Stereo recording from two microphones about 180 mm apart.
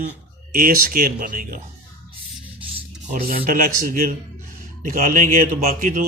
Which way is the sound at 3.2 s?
55° right (ahead or behind).